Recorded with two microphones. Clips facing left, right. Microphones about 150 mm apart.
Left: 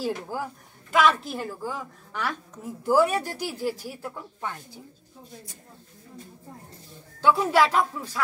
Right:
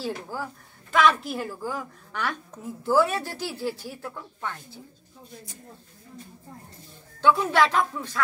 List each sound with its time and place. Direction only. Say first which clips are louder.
0.0 s speech: left 2 dB; 15° left (ahead or behind)
0.9 s a woman's voice: even; centre (ahead or behind)
2.8 s speech: left 1 dB; 15° left (ahead or behind)
7.2 s speech: even; 5° left (ahead or behind)